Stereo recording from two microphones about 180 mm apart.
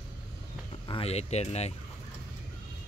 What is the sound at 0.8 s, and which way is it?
Speech, 30° left (ahead or behind).